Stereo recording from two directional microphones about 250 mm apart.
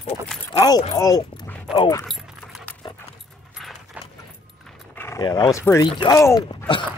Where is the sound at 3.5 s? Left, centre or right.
Centre.